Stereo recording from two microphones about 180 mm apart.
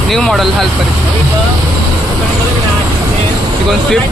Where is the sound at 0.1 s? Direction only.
Centre (ahead or behind).